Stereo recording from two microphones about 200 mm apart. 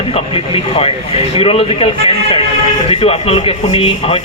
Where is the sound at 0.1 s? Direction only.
30° left (ahead or behind).